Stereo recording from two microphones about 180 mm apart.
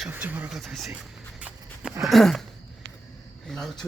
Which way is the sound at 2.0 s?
Centre (ahead or behind).